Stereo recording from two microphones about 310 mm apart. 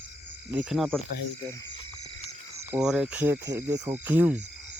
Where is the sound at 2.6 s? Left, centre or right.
Centre.